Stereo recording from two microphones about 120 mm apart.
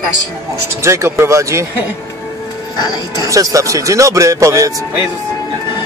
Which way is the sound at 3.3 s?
30° right (ahead or behind).